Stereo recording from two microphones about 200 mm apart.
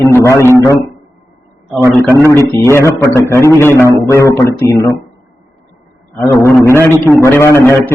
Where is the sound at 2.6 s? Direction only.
15° left (ahead or behind).